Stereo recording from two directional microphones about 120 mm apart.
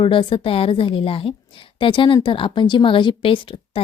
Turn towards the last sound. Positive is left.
turn(degrees=45)  # may be behind; listen again after turning